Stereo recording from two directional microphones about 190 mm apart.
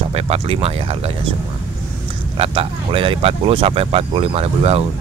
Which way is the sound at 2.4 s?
30° right (ahead or behind).